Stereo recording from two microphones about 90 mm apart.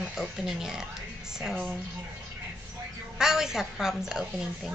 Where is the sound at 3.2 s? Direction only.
5° right (ahead or behind).